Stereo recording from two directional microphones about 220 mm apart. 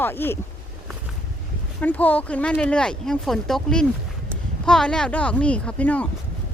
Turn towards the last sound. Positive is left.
turn(degrees=5)  # may be behind; listen again after turning